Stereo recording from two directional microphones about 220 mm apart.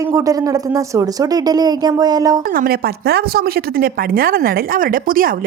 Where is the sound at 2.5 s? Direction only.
45° right (ahead or behind).